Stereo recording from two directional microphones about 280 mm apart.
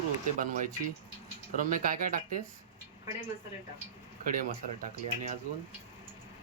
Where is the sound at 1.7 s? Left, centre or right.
Right.